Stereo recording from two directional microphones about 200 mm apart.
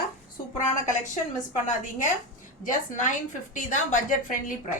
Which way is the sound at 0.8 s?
40° left (ahead or behind).